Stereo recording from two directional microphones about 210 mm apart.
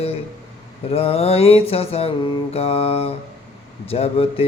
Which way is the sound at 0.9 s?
30° left (ahead or behind).